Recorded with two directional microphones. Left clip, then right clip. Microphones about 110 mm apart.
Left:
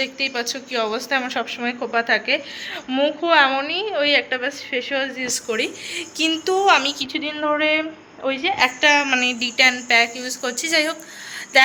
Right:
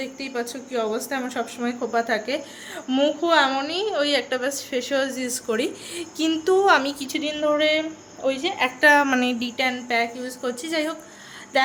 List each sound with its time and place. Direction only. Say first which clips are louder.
0.0 s a woman's voice: left 6 dB; 20° right (ahead or behind)
2.9 s a woman's voice: left 2 dB; 50° right (ahead or behind)
6.1 s a woman's voice: even; 45° right (ahead or behind)
7.0 s a woman's voice: left 1 dB; 30° right (ahead or behind)
8.8 s a woman's voice: right 2 dB; 55° right (ahead or behind)
9.0 s speech: left 3 dB; 80° right
9.6 s speech: left 8 dB; 15° right (ahead or behind)
11.5 s a sound: left 6 dB; 25° right (ahead or behind)